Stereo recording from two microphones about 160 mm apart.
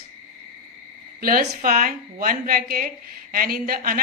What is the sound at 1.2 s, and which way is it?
A woman's voice, 65° right (ahead or behind).